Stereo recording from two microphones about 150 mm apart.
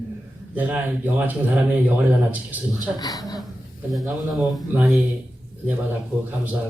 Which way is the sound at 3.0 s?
25° left (ahead or behind).